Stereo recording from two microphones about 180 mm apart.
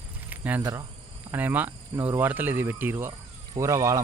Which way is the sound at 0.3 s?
10° right (ahead or behind).